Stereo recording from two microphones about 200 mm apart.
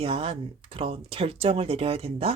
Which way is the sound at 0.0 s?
30° right (ahead or behind).